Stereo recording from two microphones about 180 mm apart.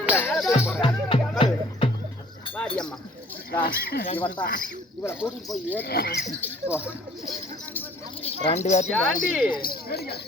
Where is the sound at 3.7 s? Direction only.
55° left (ahead or behind).